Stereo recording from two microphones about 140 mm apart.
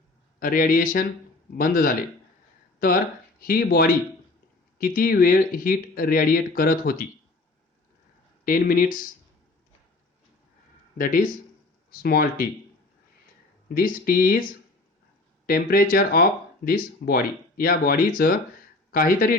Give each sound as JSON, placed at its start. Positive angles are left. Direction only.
{"t": 0.3, "sound": "speech", "side_deg": 90}
{"t": 8.4, "sound": "speech", "side_deg": 90}
{"t": 10.9, "sound": "speech", "side_deg": 80}
{"t": 13.7, "sound": "speech", "side_deg": 90}
{"t": 15.4, "sound": "speech", "side_deg": 90}